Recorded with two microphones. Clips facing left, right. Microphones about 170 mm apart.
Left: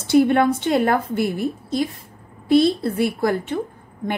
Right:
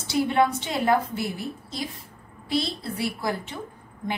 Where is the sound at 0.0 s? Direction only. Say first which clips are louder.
Left 7 dB; 55° left (ahead or behind).